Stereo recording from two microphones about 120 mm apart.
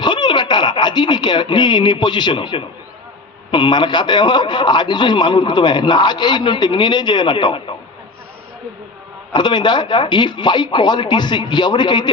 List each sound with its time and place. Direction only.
0.0 s a man's voice: 40° left (ahead or behind)
9.3 s a man's voice: 40° left (ahead or behind)